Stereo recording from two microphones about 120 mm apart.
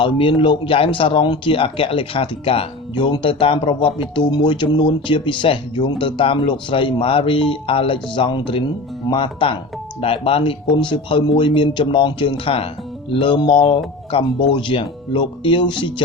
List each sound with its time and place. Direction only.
0.0 s speech: 45° left (ahead or behind)